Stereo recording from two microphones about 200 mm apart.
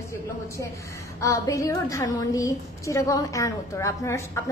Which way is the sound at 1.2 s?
15° left (ahead or behind).